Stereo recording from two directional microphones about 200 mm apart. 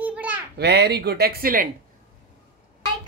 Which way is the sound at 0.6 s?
55° right (ahead or behind).